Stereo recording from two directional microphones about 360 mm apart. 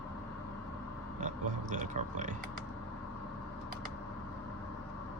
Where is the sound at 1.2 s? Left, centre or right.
Right.